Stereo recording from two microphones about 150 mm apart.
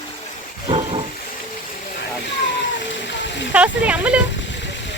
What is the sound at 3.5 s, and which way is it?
Speech, 10° right (ahead or behind).